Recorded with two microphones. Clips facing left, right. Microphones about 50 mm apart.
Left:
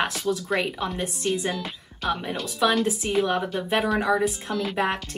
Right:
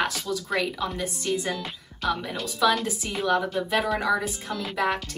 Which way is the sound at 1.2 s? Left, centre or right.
Centre.